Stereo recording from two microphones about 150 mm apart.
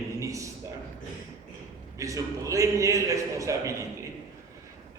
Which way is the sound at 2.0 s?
20° right (ahead or behind).